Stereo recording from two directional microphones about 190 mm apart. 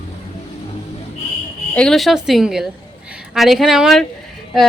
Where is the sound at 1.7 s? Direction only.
5° left (ahead or behind).